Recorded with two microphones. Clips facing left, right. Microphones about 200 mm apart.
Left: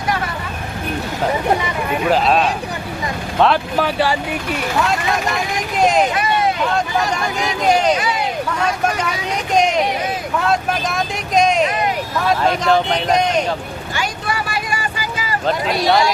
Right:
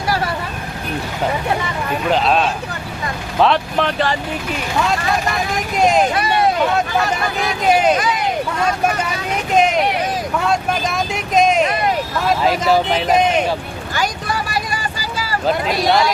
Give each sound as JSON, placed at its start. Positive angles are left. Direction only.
{"t": 2.0, "sound": "speech", "side_deg": 0}
{"t": 5.7, "sound": "speech", "side_deg": 0}
{"t": 7.7, "sound": "speech", "side_deg": -5}
{"t": 10.4, "sound": "vehicle", "side_deg": 0}
{"t": 12.2, "sound": "speech", "side_deg": 0}
{"t": 13.9, "sound": "vehicle", "side_deg": -40}
{"t": 15.4, "sound": "speech", "side_deg": 0}